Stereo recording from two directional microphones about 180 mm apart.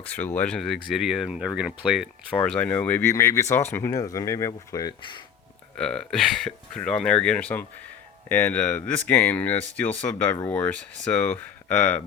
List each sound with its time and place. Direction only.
0.0 s speech: 10° left (ahead or behind); by 5.2 s 25° left (ahead or behind)
5.7 s speech: 5° left (ahead or behind)